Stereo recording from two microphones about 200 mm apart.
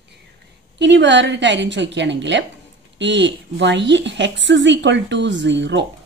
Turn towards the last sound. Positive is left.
turn(degrees=-60)  # may be behind; listen again after turning